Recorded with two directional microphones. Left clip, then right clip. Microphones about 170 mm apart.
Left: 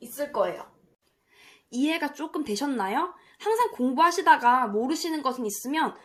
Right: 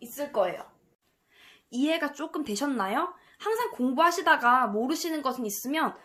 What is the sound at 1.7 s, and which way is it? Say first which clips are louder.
A woman's voice: even; 10° right (ahead or behind).